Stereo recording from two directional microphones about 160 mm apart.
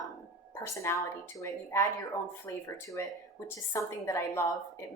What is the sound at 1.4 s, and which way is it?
A woman's voice, 15° left (ahead or behind).